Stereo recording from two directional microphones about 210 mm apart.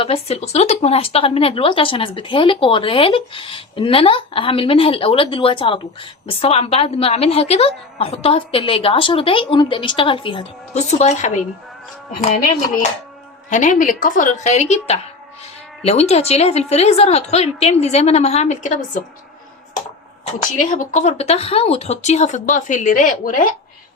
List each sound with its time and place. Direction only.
0.0 s speech: 25° left (ahead or behind)
13.5 s a woman's voice: 35° left (ahead or behind)
20.6 s a woman's voice: 40° left (ahead or behind)